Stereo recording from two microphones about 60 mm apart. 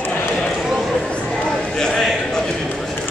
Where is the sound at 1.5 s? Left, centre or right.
Centre.